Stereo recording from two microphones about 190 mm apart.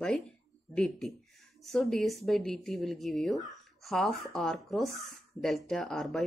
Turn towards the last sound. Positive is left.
turn(degrees=0)  # may be behind; listen again after turning